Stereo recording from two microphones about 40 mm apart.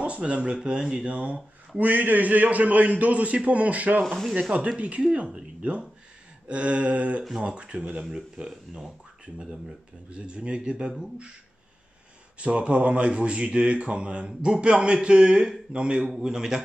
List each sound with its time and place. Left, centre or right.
0.0 s speech: right
1.0 s a man's voice: right; by 8.9 s centre
10.1 s speech: right
12.4 s speech: right